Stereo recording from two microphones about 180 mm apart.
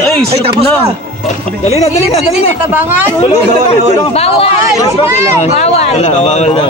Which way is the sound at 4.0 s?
35° left (ahead or behind).